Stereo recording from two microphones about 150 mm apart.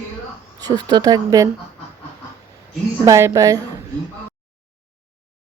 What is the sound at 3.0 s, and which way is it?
Speech, 20° right (ahead or behind).